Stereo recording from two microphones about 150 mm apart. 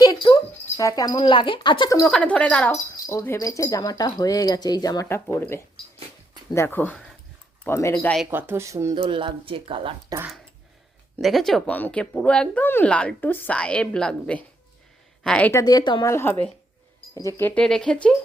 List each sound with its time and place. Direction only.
0.0 s a sound: 30° left (ahead or behind)
2.0 s speech: 5° left (ahead or behind)
8.3 s speech: 15° right (ahead or behind)
9.0 s speech: 35° right (ahead or behind)
10.1 s speech: 25° right (ahead or behind)
11.2 s speech: centre (ahead or behind)
15.6 s speech: 30° left (ahead or behind)
16.0 s speech: 15° left (ahead or behind)